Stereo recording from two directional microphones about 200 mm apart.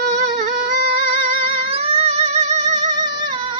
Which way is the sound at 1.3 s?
30° right (ahead or behind).